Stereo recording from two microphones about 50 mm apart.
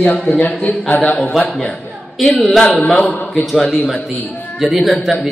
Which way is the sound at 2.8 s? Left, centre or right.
Left.